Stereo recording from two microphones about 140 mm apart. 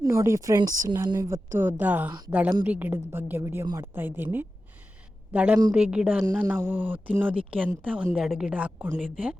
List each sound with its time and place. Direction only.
0.0 s speech: 20° right (ahead or behind)
1.5 s a woman's voice: 15° right (ahead or behind)